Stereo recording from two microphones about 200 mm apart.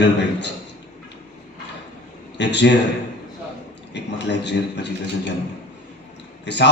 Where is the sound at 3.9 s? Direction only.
60° left (ahead or behind).